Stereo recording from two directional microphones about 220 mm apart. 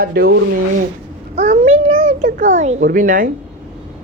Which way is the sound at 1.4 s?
30° right (ahead or behind).